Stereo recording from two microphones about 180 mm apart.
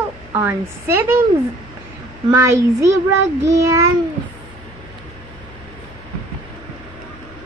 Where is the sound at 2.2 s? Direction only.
15° right (ahead or behind).